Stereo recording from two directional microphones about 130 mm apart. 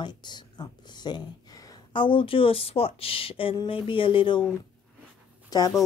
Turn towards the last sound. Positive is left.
turn(degrees=30)  # may be behind; listen again after turning